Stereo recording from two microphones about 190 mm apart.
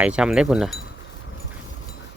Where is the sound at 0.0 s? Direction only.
5° right (ahead or behind).